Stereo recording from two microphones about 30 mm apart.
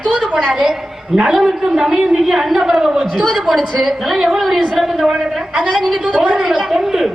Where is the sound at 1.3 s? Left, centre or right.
Centre.